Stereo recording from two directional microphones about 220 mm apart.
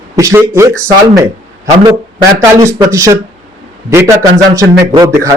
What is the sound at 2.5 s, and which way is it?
Speech, 15° right (ahead or behind).